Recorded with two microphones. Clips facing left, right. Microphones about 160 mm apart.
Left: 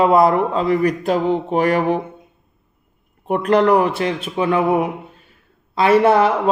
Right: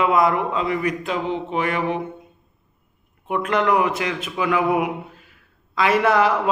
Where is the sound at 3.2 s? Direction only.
35° left (ahead or behind).